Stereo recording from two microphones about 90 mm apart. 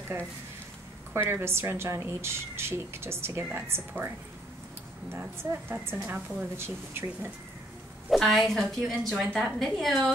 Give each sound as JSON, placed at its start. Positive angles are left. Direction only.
{"t": 1.1, "sound": "a woman's voice", "side_deg": -30}
{"t": 5.4, "sound": "a woman's voice", "side_deg": -25}
{"t": 8.1, "sound": "a woman's voice", "side_deg": 0}